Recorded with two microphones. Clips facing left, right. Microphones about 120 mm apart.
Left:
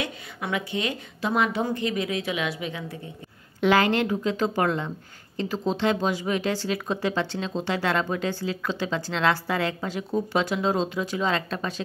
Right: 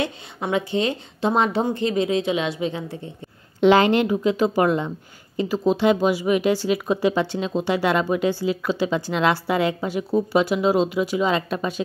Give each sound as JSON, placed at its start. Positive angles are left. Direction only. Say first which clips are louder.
{"t": 0.0, "sound": "a woman's voice", "louder": "right 5 dB", "side_deg": -30}